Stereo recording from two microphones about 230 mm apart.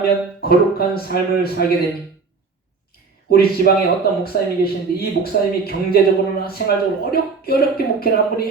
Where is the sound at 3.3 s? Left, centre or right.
Left.